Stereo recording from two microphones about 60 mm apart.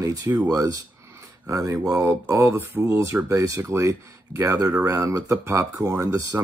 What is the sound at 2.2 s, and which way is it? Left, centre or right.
Speech, right.